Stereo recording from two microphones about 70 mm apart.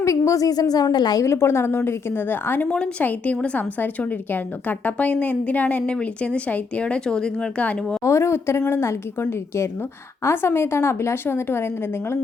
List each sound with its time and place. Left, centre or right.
0.0 s a woman's voice: left
1.2 s a woman's voice: left
2.6 s a woman's voice: centre
8.0 s a woman's voice: left
10.2 s a woman's voice: left